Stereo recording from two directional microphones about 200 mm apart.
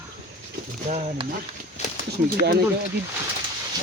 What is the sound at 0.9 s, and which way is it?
Speech, 35° right (ahead or behind).